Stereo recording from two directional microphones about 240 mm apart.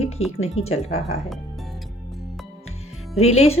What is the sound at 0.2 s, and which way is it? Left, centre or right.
Speech, left.